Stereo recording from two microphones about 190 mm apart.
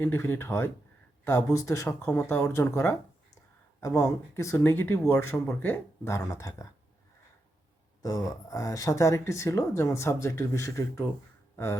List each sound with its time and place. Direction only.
0.0 s speech: 10° left (ahead or behind)
8.0 s speech: 20° left (ahead or behind)